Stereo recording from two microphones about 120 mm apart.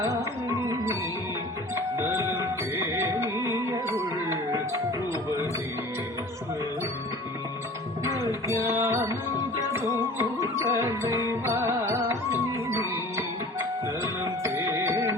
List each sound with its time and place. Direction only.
1.7 s music: 20° right (ahead or behind)
8.0 s tabla: 25° right (ahead or behind)
8.6 s music: 25° right (ahead or behind)